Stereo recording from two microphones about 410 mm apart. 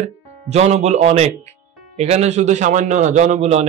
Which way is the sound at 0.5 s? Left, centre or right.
Centre.